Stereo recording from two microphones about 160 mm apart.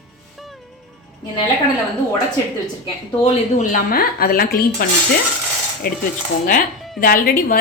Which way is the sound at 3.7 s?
65° left (ahead or behind).